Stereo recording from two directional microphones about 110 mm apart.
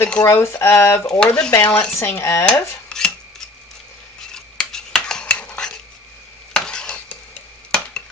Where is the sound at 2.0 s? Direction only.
25° left (ahead or behind).